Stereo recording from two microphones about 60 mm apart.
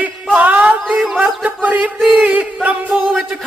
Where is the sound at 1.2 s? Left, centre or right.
Right.